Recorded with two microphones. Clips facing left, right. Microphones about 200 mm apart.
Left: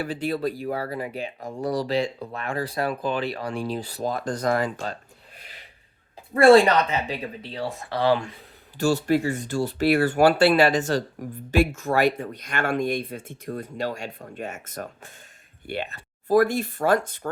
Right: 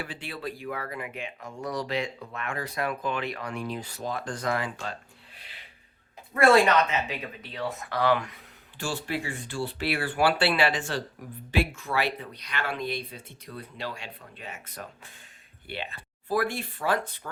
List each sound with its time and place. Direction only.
0.0 s speech: 40° left (ahead or behind)
6.3 s speech: 30° left (ahead or behind)
8.8 s speech: 40° left (ahead or behind)